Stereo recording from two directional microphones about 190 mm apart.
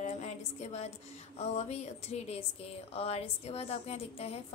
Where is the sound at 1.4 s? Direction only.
35° left (ahead or behind).